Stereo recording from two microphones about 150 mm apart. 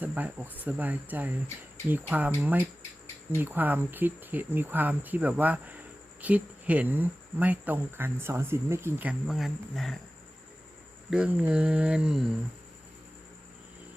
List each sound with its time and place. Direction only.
0.0 s speech: 10° right (ahead or behind)
9.2 s speech: centre (ahead or behind)
11.1 s speech: 10° right (ahead or behind)